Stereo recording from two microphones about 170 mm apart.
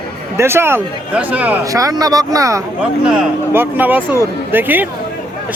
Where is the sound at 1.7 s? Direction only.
20° right (ahead or behind).